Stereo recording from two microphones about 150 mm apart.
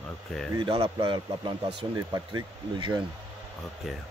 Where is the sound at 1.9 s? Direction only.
20° right (ahead or behind).